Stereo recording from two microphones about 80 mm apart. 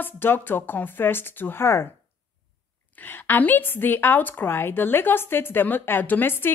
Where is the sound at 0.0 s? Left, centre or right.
Left.